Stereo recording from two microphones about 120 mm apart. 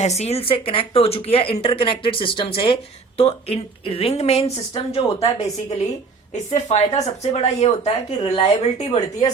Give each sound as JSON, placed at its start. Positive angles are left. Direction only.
{"t": 0.0, "sound": "speech", "side_deg": 65}
{"t": 6.3, "sound": "speech", "side_deg": 70}